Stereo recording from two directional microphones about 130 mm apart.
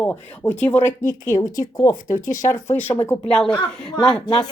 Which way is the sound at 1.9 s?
80° left.